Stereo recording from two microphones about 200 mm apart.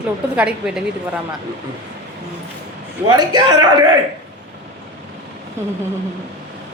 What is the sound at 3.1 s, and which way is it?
Speech, 20° right (ahead or behind).